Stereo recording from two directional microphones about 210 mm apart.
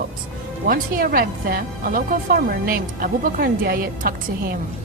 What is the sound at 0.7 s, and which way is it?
A man's voice, 45° right (ahead or behind).